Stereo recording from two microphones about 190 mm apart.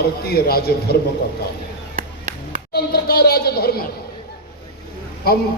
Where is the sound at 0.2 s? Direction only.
55° left (ahead or behind).